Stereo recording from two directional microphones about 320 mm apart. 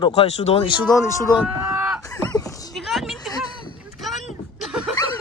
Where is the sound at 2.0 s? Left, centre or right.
Centre.